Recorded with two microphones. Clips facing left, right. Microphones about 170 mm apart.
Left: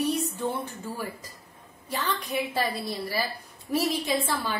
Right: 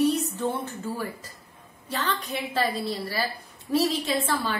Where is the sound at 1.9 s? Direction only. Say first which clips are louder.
Even; 10° left (ahead or behind).